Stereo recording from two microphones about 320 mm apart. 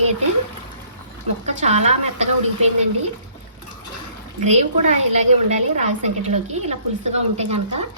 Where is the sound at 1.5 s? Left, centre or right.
Right.